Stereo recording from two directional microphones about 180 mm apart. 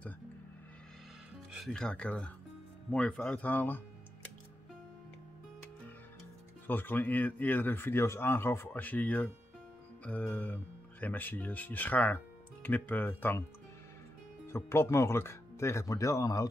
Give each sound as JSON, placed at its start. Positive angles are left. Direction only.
{"t": 1.5, "sound": "speech", "side_deg": 0}
{"t": 6.7, "sound": "speech", "side_deg": 10}
{"t": 14.5, "sound": "speech", "side_deg": 15}